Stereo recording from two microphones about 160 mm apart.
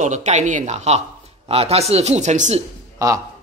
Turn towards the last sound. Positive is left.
turn(degrees=-20)  # may be behind; listen again after turning